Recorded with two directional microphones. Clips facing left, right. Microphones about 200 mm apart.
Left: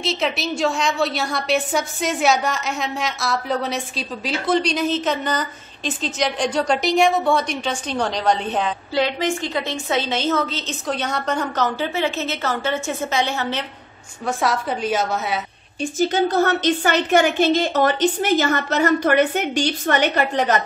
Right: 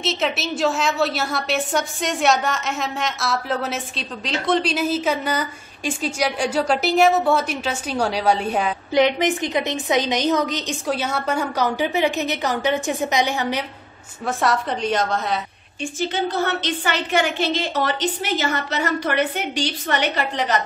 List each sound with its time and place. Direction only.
0.0 s a woman's voice: centre (ahead or behind)
14.2 s a woman's voice: centre (ahead or behind)
15.8 s a woman's voice: 40° left (ahead or behind)